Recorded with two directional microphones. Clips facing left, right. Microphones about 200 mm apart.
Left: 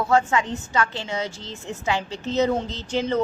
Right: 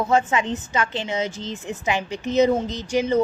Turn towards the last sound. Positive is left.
turn(degrees=-10)  # may be behind; listen again after turning